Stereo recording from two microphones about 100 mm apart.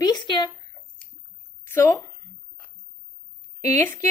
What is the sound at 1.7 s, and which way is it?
Speech, 30° left (ahead or behind).